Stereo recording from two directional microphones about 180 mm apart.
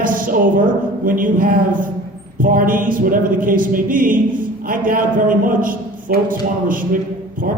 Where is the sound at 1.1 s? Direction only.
50° right (ahead or behind).